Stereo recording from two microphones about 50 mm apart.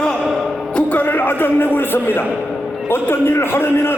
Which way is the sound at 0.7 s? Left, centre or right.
Left.